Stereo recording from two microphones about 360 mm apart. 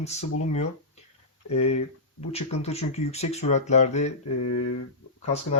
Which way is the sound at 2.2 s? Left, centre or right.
Centre.